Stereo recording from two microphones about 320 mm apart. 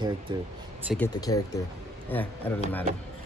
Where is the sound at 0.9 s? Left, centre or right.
Centre.